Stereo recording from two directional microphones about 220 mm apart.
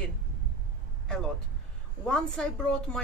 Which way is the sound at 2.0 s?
5° left (ahead or behind).